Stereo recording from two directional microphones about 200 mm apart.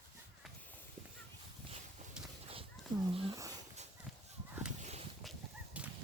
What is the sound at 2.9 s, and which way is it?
Speech, 25° right (ahead or behind).